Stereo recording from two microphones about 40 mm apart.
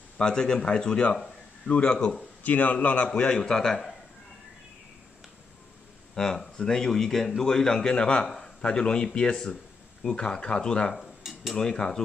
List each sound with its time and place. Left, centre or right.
0.2 s speech: centre
2.4 s a man's voice: left
3.2 s speech: left
6.1 s speech: centre